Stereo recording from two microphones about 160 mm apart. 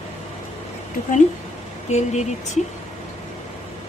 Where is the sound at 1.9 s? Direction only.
45° left (ahead or behind).